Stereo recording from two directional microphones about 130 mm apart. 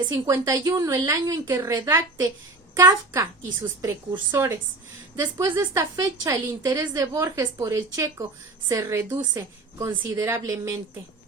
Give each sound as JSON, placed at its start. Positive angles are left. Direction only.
{"t": 0.1, "sound": "a woman's voice", "side_deg": -20}